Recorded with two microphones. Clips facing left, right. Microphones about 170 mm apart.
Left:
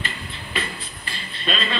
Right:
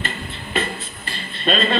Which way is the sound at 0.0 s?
50° right (ahead or behind).